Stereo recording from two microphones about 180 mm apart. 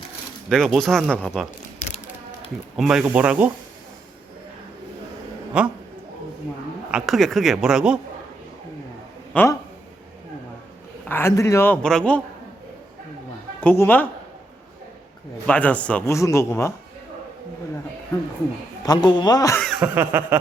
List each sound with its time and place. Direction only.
0.5 s speech: centre (ahead or behind)
2.7 s speech: centre (ahead or behind)
5.5 s speech: 5° right (ahead or behind)
6.9 s speech: centre (ahead or behind)
9.3 s speech: 10° left (ahead or behind)
11.0 s a man's voice: 10° left (ahead or behind)
13.6 s a man's voice: 10° left (ahead or behind)
15.4 s a man's voice: 10° left (ahead or behind)
18.9 s speech: 25° left (ahead or behind)
19.6 s chuckle: 5° right (ahead or behind)
20.0 s speech: 15° right (ahead or behind)